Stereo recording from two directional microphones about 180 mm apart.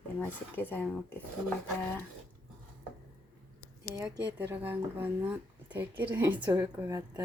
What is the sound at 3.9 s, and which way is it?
Speech, 15° right (ahead or behind).